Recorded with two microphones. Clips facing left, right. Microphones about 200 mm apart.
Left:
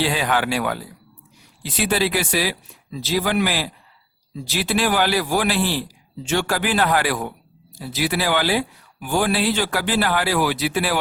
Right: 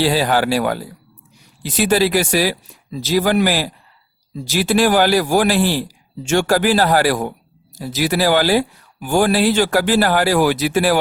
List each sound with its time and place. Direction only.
0.0 s a man's voice: 35° right (ahead or behind)